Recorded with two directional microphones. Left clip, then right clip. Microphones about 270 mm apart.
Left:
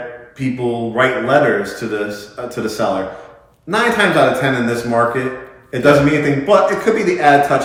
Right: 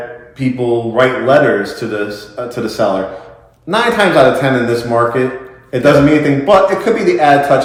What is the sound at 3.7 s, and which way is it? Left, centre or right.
Speech, centre.